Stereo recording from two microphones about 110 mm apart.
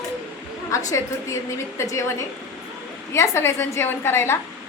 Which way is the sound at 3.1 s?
25° left (ahead or behind).